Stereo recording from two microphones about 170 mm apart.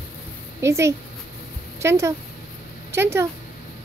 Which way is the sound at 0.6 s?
15° right (ahead or behind).